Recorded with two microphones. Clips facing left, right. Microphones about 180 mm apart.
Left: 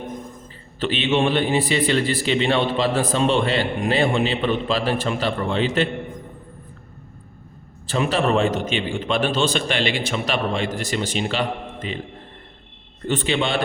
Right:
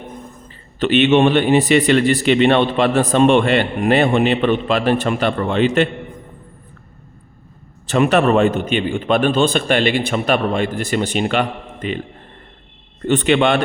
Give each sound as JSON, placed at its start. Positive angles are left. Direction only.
{"t": 0.1, "sound": "a man's voice", "side_deg": -65}
{"t": 7.9, "sound": "a man's voice", "side_deg": -65}
{"t": 13.1, "sound": "a man's voice", "side_deg": -65}